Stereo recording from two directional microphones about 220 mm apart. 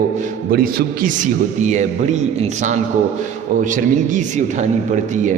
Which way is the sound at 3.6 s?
35° right (ahead or behind).